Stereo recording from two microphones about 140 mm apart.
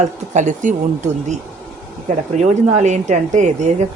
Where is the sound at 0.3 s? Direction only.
60° right (ahead or behind).